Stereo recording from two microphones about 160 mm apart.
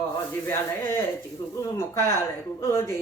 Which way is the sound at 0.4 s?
15° left (ahead or behind).